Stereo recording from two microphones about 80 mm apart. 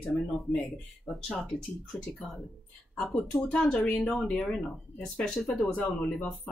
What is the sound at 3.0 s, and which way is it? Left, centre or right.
Speech, centre.